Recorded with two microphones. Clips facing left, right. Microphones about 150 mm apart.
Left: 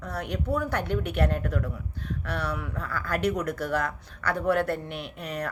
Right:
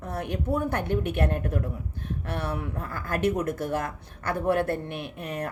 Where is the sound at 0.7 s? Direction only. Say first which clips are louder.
Right 1 dB; 50° right (ahead or behind).